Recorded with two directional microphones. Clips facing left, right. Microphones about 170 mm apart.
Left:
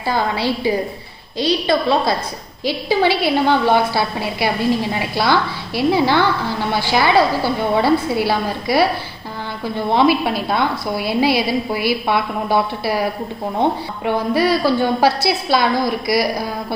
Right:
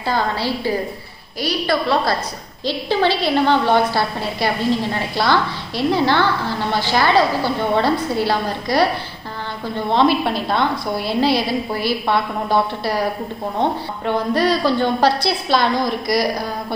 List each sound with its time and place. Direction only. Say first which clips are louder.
0.0 s a woman's voice: left 1 dB; 15° left (ahead or behind)
9.8 s a woman's voice: left 1 dB; 10° left (ahead or behind)